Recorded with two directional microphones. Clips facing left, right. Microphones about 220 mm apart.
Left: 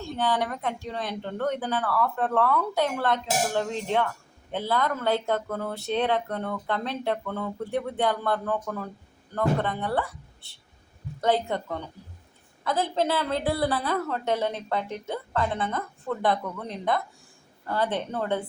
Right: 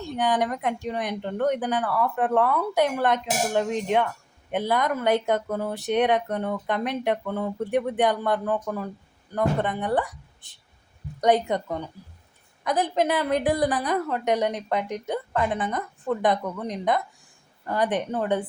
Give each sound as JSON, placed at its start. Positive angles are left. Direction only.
{"t": 0.2, "sound": "speech", "side_deg": -15}